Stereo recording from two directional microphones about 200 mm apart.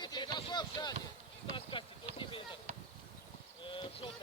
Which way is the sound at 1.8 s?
25° left (ahead or behind).